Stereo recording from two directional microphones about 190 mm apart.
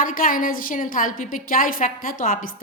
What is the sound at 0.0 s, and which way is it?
A woman's voice, 45° left (ahead or behind).